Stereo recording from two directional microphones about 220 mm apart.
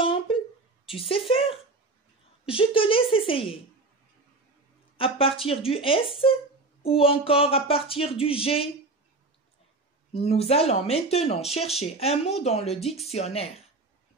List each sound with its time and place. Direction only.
0.0 s a sound: 25° left (ahead or behind)
0.8 s a woman's voice: 25° left (ahead or behind)
4.9 s a woman's voice: 25° left (ahead or behind)
10.1 s a woman's voice: 25° left (ahead or behind)